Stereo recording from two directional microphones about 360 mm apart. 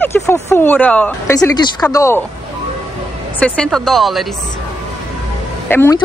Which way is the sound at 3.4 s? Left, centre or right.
Centre.